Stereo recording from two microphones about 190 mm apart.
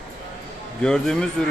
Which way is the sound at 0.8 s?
5° left (ahead or behind).